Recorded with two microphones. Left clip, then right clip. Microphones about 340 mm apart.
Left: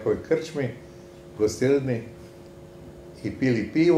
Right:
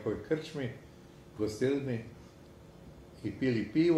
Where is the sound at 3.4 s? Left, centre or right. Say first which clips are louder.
Left 7 dB; right.